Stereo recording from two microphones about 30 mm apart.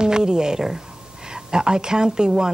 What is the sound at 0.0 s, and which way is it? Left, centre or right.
A woman's voice, right.